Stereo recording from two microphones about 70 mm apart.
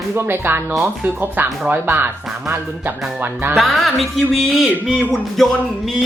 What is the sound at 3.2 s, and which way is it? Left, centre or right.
Speech, right.